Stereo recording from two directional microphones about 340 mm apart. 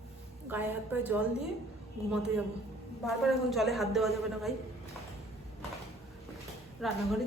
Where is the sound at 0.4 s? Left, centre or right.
Centre.